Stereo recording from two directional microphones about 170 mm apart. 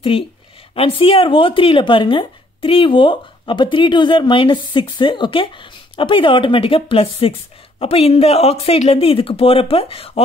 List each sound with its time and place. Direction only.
0.1 s speech: 30° left (ahead or behind)